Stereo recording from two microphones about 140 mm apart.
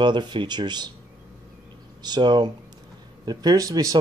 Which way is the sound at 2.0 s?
30° right (ahead or behind).